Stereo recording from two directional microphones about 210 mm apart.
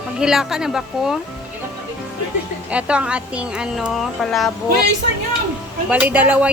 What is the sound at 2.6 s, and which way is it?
A woman's voice, 5° right (ahead or behind).